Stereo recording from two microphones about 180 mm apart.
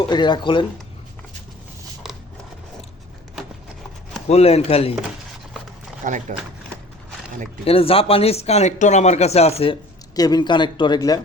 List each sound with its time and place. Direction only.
0.1 s speech: 25° left (ahead or behind)
4.3 s speech: 35° left (ahead or behind)
6.1 s speech: 45° right (ahead or behind)
7.6 s speech: 30° left (ahead or behind)
10.2 s speech: 20° left (ahead or behind)